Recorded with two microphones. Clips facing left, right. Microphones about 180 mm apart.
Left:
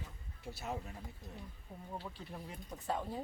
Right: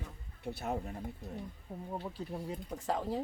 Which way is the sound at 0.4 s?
60° right (ahead or behind).